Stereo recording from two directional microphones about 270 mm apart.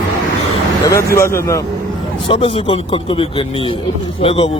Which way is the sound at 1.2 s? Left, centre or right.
Centre.